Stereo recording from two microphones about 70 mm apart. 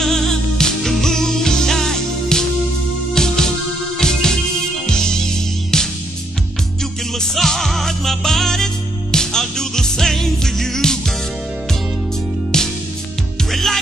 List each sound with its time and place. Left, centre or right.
0.0 s music: centre
7.2 s music: centre
12.5 s music: centre